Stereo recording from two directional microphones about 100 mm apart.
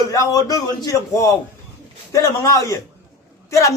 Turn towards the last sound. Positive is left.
turn(degrees=30)  # may be behind; listen again after turning